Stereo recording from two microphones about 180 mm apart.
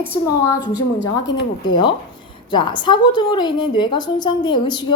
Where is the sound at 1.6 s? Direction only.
25° left (ahead or behind).